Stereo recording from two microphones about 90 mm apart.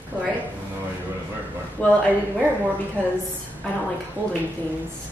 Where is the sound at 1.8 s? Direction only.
15° left (ahead or behind).